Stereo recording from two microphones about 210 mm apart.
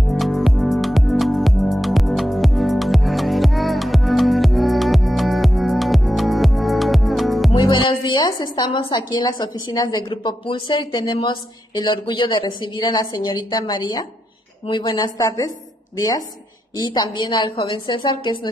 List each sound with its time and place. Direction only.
0.1 s music: centre (ahead or behind)
7.5 s a woman's voice: 20° left (ahead or behind)
16.7 s a woman's voice: 20° left (ahead or behind)